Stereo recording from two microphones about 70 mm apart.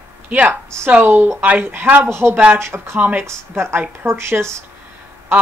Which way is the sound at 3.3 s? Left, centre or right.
Right.